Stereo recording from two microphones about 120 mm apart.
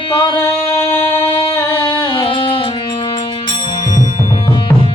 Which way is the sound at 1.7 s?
45° left (ahead or behind).